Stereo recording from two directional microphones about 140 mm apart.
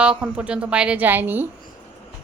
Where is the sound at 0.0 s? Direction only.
10° right (ahead or behind).